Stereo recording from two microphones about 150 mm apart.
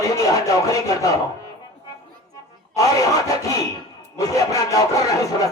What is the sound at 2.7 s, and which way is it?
Speech, 20° left (ahead or behind).